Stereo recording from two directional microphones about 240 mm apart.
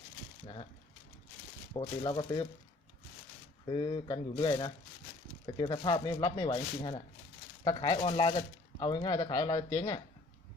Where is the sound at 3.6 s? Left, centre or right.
Left.